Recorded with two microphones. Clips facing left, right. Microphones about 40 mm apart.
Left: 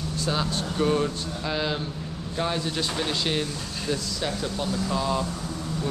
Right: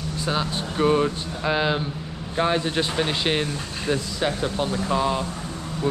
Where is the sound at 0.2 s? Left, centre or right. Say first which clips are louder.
Right 2 dB; centre.